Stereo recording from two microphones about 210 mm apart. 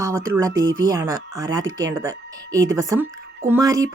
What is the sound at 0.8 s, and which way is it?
Speech, 15° right (ahead or behind).